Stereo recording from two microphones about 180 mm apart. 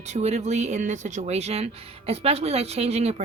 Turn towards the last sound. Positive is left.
turn(degrees=-35)  # may be behind; listen again after turning